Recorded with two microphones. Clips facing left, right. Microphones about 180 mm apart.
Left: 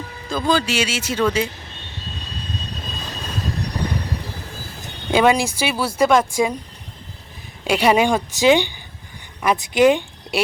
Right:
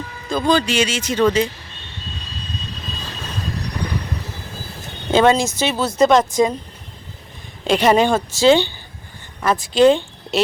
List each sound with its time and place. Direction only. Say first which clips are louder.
0.3 s speech: right 2 dB; 5° left (ahead or behind)
5.1 s speech: right 2 dB; 10° left (ahead or behind)
7.6 s speech: right 2 dB; 10° left (ahead or behind)